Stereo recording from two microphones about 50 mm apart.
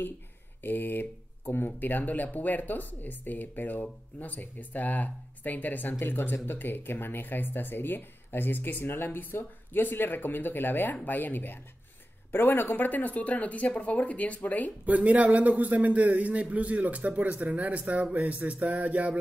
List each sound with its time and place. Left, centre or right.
0.6 s speech: left
5.9 s speech: left
14.9 s a man's voice: right